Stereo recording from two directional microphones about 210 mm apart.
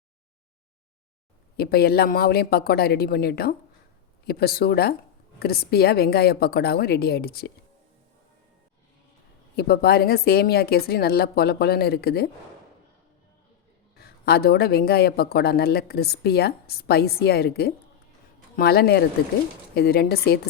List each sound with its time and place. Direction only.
1.5 s speech: 50° left (ahead or behind)
9.6 s speech: 50° left (ahead or behind)
13.9 s speech: 50° left (ahead or behind)